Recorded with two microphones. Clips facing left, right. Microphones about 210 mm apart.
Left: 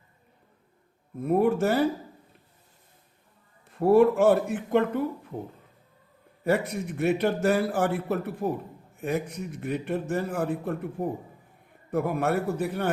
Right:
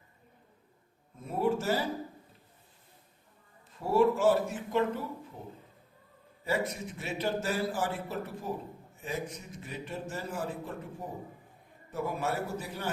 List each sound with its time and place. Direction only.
1.2 s a man's voice: 60° left (ahead or behind)
3.7 s a man's voice: 60° left (ahead or behind)
6.4 s a man's voice: 60° left (ahead or behind)